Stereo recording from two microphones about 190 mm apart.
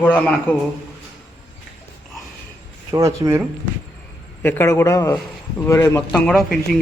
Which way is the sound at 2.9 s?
15° right (ahead or behind).